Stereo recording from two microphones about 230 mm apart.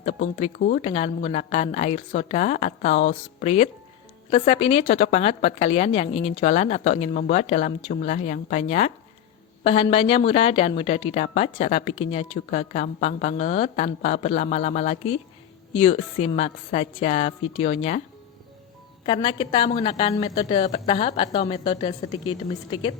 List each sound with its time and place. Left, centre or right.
0.0 s speech: left
19.0 s speech: left